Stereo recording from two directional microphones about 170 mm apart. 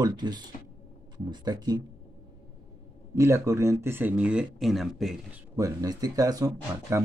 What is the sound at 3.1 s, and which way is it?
Speech, 15° right (ahead or behind).